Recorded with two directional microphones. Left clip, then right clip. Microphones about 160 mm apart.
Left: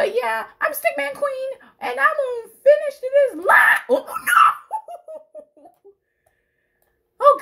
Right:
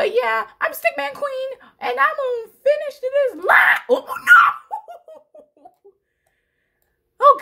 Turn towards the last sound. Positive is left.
turn(degrees=-35)  # may be behind; listen again after turning